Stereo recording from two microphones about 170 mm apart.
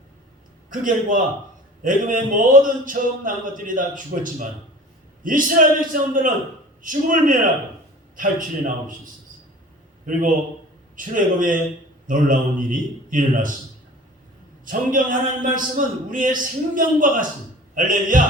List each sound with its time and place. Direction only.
0.7 s speech: 50° right (ahead or behind)
10.1 s speech: 50° right (ahead or behind)
14.6 s speech: 55° right (ahead or behind)